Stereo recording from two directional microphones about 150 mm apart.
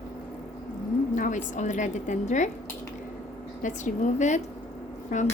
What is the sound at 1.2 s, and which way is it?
A woman's voice, 60° left (ahead or behind).